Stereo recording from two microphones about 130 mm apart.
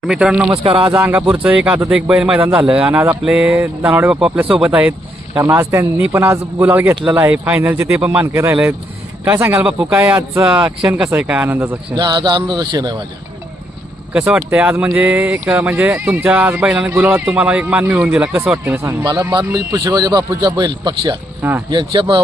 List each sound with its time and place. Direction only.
0.1 s speech: 5° right (ahead or behind)
0.6 s speech: 45° right (ahead or behind)
0.9 s a man's voice: 20° right (ahead or behind)
11.2 s speech: 10° right (ahead or behind)
11.9 s speech: 35° right (ahead or behind)
14.1 s speech: 10° right (ahead or behind)
19.0 s speech: 30° right (ahead or behind)